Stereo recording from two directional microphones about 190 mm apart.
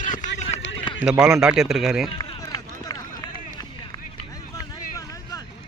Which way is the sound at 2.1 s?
20° left (ahead or behind).